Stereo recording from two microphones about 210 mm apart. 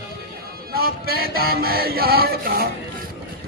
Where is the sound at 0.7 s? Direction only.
45° right (ahead or behind).